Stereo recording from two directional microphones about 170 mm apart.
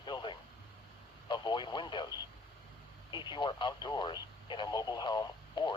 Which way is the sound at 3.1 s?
25° left (ahead or behind).